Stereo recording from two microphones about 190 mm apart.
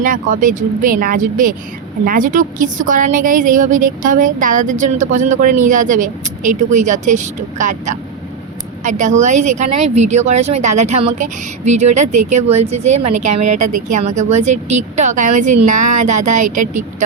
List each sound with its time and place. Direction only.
0.0 s a woman's voice: 45° right (ahead or behind)